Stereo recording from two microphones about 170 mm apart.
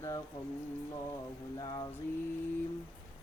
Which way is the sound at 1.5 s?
20° left (ahead or behind).